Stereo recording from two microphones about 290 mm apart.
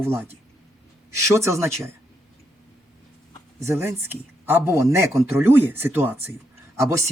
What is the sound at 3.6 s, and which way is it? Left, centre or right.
Speech, centre.